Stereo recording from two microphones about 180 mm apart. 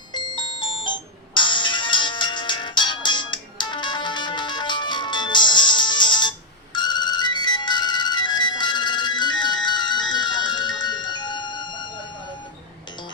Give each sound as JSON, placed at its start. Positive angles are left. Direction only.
{"t": 0.1, "sound": "music", "side_deg": 25}